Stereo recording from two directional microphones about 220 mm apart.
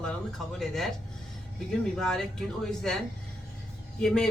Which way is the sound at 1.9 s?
Centre (ahead or behind).